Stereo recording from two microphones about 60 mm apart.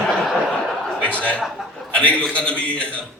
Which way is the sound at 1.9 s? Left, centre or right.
Left.